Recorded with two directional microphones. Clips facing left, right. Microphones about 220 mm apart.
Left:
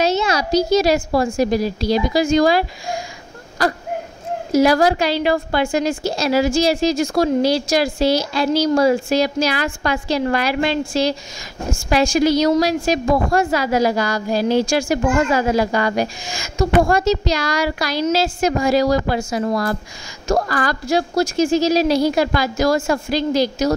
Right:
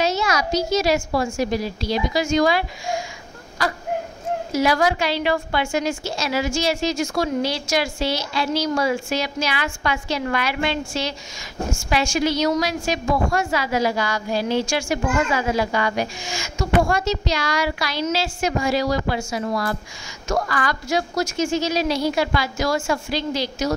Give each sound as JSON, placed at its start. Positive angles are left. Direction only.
{"t": 0.1, "sound": "a woman's voice", "side_deg": 25}
{"t": 4.5, "sound": "a woman's voice", "side_deg": 40}